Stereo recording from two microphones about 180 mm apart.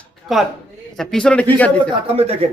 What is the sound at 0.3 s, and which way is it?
A man's voice, centre (ahead or behind).